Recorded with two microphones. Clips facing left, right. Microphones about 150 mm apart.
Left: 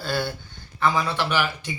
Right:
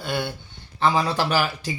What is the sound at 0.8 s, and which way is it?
Speech, 30° right (ahead or behind).